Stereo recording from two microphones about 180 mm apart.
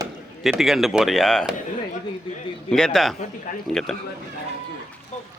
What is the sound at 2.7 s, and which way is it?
A man's voice, 5° left (ahead or behind).